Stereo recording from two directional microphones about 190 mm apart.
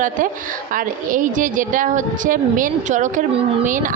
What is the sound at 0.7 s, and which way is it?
A woman's voice, 45° right (ahead or behind).